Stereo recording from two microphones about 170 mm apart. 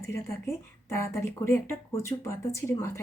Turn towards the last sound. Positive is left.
turn(degrees=15)  # may be behind; listen again after turning